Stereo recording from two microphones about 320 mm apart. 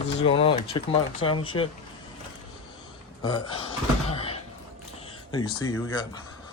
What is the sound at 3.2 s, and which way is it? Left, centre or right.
Speech, centre.